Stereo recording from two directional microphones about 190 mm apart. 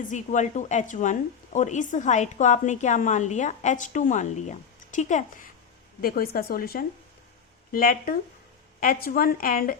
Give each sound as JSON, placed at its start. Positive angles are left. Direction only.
{"t": 0.1, "sound": "a woman's voice", "side_deg": 40}
{"t": 6.0, "sound": "a woman's voice", "side_deg": 50}